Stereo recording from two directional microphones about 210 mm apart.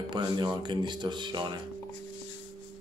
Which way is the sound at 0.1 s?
20° right (ahead or behind).